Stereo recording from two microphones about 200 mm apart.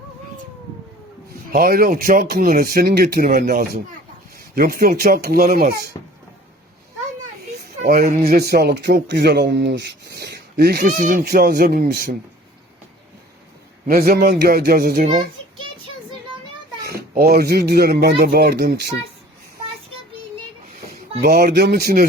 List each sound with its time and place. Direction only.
1.5 s a man's voice: 45° right (ahead or behind)
7.8 s speech: 50° right (ahead or behind)
13.8 s speech: 45° right (ahead or behind)
16.8 s speech: 50° right (ahead or behind)
21.2 s speech: 45° right (ahead or behind)